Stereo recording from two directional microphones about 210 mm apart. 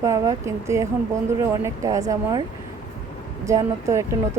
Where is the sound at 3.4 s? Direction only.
15° right (ahead or behind).